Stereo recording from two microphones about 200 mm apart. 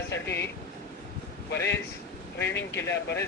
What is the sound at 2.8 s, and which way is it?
Speech, 15° left (ahead or behind).